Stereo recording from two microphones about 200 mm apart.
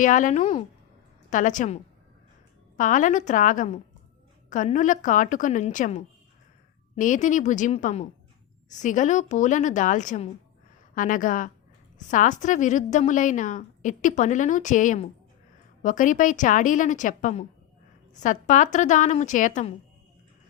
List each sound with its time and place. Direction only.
0.0 s a woman's voice: 40° left (ahead or behind)